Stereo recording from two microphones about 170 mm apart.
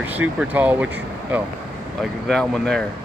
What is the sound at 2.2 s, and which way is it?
Speech, 5° left (ahead or behind).